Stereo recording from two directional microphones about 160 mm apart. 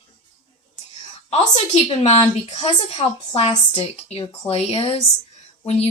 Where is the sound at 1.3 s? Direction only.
40° left (ahead or behind).